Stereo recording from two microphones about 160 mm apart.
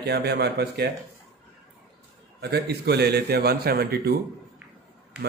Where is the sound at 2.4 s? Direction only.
90° right; by 4.1 s 70° right (ahead or behind).